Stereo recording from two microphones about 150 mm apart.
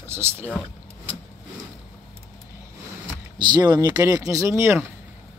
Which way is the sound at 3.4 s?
30° right (ahead or behind).